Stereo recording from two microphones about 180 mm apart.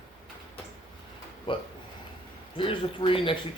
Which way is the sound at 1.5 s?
30° left (ahead or behind).